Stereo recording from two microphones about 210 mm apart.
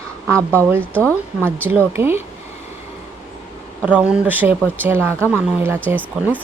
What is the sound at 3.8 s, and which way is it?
Speech, 5° right (ahead or behind).